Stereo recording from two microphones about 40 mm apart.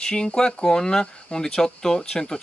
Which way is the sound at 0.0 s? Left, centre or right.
Centre.